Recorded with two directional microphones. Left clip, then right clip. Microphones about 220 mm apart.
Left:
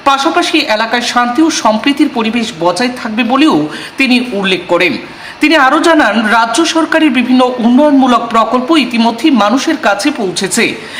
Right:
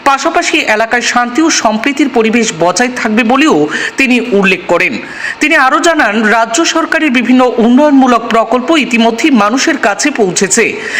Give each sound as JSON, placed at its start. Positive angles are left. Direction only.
{"t": 0.0, "sound": "a woman's voice", "side_deg": -25}